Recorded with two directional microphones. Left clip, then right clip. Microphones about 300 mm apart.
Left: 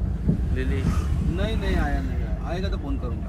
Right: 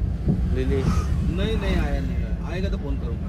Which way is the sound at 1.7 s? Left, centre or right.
Centre.